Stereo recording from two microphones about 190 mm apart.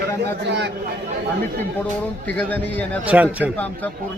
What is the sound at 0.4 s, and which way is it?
Speech, 60° right (ahead or behind).